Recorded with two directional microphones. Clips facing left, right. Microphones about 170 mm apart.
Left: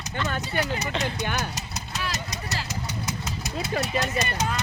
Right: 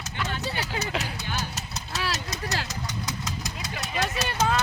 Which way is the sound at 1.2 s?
55° left (ahead or behind).